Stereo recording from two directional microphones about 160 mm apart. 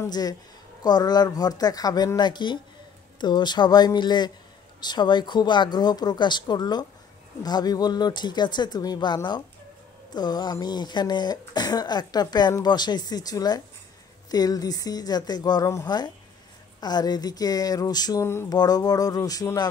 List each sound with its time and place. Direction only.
0.1 s speech: 25° left (ahead or behind)